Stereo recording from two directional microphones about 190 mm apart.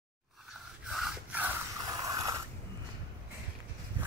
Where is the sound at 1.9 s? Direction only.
20° right (ahead or behind).